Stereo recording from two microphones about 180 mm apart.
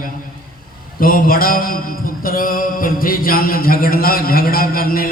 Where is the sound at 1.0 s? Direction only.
50° left (ahead or behind).